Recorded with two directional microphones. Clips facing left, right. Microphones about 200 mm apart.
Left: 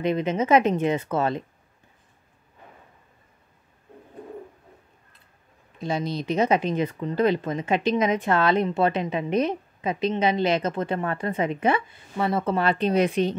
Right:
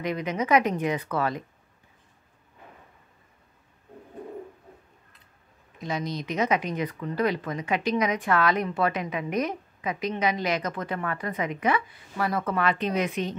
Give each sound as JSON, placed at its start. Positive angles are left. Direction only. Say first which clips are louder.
{"t": 0.0, "sound": "speech", "louder": "left 5 dB", "side_deg": 25}
{"t": 5.8, "sound": "speech", "louder": "left 4 dB", "side_deg": 30}